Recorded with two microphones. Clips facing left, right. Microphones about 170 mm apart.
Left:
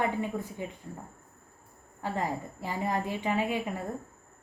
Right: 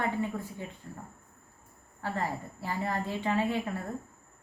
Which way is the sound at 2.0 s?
15° left (ahead or behind).